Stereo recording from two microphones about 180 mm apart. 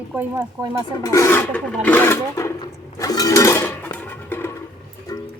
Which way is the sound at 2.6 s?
20° left (ahead or behind).